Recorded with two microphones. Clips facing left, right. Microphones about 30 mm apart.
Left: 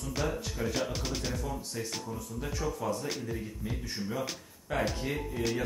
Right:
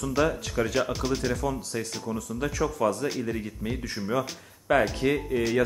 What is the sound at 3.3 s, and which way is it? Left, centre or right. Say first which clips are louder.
Speech: right 6 dB; right.